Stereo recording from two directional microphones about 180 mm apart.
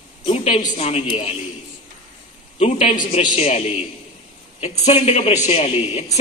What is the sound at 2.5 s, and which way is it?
A man's voice, 40° left (ahead or behind).